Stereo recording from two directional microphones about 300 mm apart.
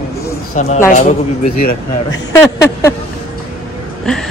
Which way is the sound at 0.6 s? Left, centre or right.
Left.